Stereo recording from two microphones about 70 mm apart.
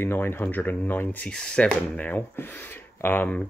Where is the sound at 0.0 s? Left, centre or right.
Left.